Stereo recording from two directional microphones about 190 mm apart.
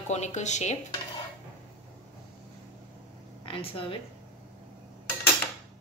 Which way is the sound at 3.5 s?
30° left (ahead or behind).